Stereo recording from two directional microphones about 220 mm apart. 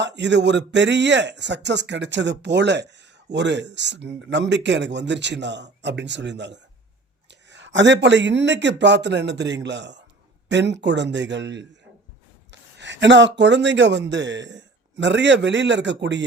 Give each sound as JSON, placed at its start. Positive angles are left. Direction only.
{"t": 0.0, "sound": "speech", "side_deg": -50}